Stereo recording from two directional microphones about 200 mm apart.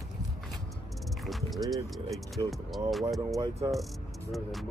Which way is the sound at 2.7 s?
Centre (ahead or behind).